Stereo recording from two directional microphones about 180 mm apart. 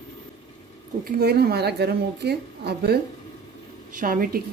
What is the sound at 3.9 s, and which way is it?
Speech, 50° right (ahead or behind).